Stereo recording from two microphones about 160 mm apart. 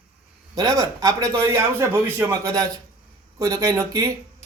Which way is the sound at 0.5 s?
25° right (ahead or behind).